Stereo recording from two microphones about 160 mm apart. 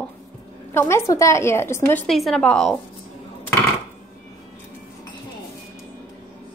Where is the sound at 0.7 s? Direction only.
15° left (ahead or behind).